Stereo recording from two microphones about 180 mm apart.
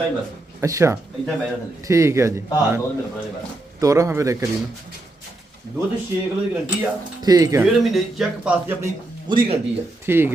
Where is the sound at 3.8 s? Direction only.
15° right (ahead or behind).